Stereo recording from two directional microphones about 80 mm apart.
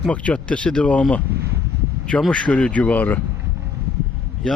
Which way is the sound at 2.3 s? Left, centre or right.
Centre.